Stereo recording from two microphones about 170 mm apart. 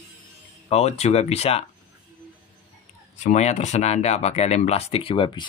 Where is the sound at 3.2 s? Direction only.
40° left (ahead or behind).